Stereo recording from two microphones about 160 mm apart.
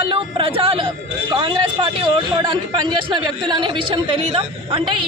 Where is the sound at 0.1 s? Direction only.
35° right (ahead or behind).